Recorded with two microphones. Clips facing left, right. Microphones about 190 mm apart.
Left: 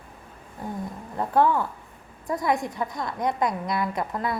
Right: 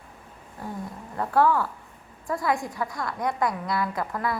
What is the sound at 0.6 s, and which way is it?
A woman's voice, 20° left (ahead or behind).